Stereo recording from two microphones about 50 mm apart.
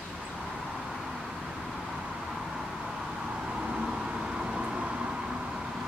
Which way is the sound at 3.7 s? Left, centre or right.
Centre.